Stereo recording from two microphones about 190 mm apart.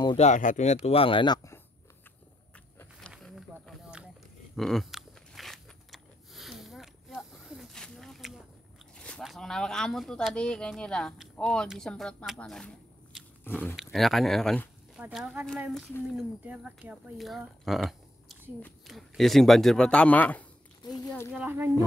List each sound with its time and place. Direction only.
0.2 s speech: 40° left (ahead or behind); by 1.6 s 20° left (ahead or behind)
3.1 s a sound: 5° right (ahead or behind)
4.6 s biting: centre (ahead or behind)
8.9 s speech: 5° left (ahead or behind)
20.8 s speech: 20° left (ahead or behind)
21.3 s speech: 10° right (ahead or behind)